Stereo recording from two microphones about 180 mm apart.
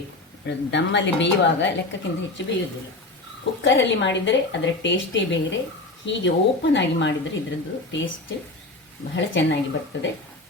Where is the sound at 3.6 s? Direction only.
90° left.